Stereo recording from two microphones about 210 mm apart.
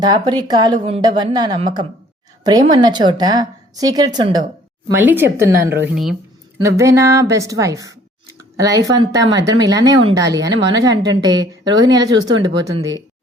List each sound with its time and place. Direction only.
0.0 s a woman's voice: 20° right (ahead or behind); by 6.1 s 5° right (ahead or behind)
6.6 s a woman's voice: 15° right (ahead or behind)